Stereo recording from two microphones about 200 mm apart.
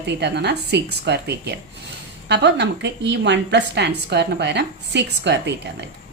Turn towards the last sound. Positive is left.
turn(degrees=-60)  # may be behind; listen again after turning